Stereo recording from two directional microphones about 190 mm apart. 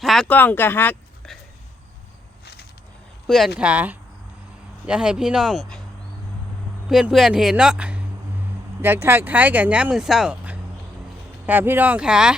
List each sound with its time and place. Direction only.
0.0 s speech: centre (ahead or behind)
2.4 s a sound: 60° left (ahead or behind)
3.2 s speech: centre (ahead or behind)
6.8 s speech: centre (ahead or behind)